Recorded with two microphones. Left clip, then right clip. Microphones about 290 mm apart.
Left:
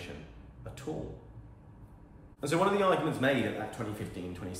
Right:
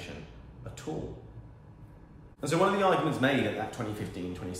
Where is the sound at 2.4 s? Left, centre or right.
Centre.